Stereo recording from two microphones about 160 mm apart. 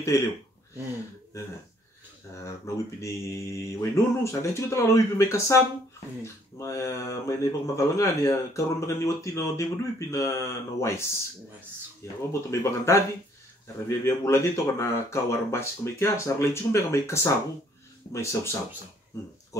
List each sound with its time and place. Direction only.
0.0 s speech: 20° left (ahead or behind)
2.4 s speech: 20° left (ahead or behind)
12.3 s speech: 15° left (ahead or behind)